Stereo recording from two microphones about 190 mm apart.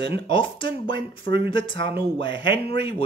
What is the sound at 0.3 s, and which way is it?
Speech, 25° left (ahead or behind).